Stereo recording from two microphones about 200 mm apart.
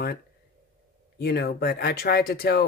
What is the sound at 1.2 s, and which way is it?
Speech, 55° left (ahead or behind).